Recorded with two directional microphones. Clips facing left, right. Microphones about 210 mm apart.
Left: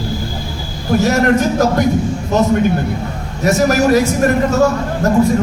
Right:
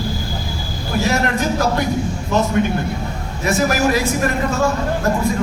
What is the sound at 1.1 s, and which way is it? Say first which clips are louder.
Speech: left 6 dB; 45° left (ahead or behind).